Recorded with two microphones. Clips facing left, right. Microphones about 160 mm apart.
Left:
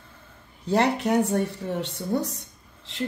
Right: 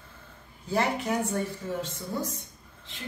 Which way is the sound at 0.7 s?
75° left (ahead or behind).